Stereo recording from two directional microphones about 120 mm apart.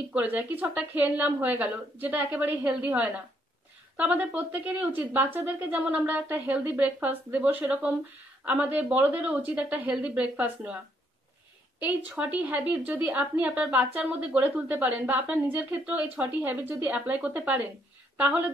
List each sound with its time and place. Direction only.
0.1 s a woman's voice: 10° right (ahead or behind)
11.8 s a woman's voice: 10° right (ahead or behind)